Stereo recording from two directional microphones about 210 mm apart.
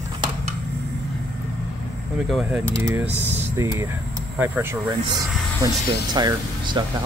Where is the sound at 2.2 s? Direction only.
Centre (ahead or behind).